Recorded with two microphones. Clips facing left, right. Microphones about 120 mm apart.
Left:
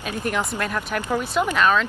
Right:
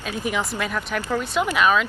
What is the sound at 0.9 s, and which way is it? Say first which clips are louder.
Speech: left 1 dB; 15° left (ahead or behind).